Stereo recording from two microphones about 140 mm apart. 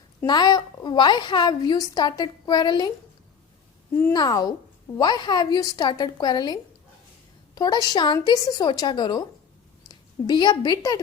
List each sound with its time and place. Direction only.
0.3 s a woman's voice: 30° left (ahead or behind)
4.1 s a woman's voice: 30° left (ahead or behind)